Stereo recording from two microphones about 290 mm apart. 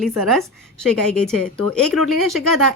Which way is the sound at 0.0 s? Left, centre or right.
Centre.